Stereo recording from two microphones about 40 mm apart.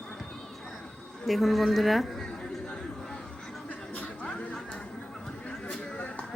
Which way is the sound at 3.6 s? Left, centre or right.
Left.